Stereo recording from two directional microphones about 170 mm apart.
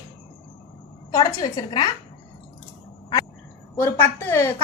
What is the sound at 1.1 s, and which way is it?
Speech, 20° left (ahead or behind).